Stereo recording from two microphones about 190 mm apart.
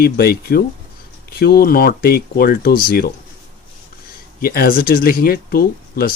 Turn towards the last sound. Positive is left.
turn(degrees=55)  # may be behind; listen again after turning